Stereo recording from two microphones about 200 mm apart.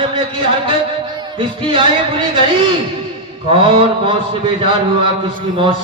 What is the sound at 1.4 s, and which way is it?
Speech, 25° right (ahead or behind).